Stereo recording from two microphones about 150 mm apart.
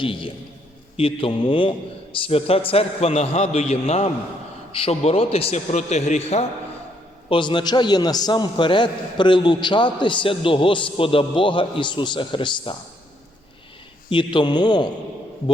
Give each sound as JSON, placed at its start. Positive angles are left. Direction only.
{"t": 0.0, "sound": "a man's voice", "side_deg": 35}
{"t": 7.3, "sound": "a man's voice", "side_deg": 35}
{"t": 14.1, "sound": "a man's voice", "side_deg": 30}